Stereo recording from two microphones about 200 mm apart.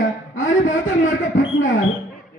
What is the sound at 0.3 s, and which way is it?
Speech, 40° left (ahead or behind).